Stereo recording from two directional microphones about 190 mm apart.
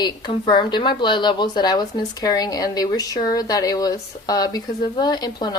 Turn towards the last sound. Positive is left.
turn(degrees=20)  # may be behind; listen again after turning